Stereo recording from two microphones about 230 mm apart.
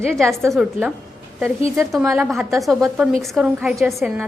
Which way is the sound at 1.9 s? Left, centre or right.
Centre.